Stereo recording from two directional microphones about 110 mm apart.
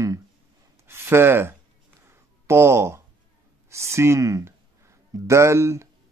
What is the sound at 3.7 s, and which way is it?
Speech, 25° right (ahead or behind).